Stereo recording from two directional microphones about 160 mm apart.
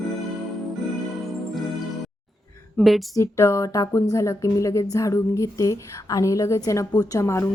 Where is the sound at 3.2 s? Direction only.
20° left (ahead or behind).